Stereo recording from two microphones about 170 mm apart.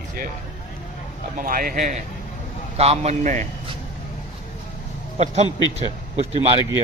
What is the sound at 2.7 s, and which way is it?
Speech, 35° right (ahead or behind).